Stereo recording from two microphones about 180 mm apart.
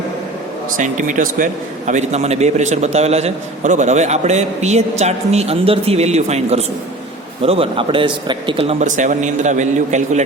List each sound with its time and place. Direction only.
0.8 s a man's voice: 45° right (ahead or behind)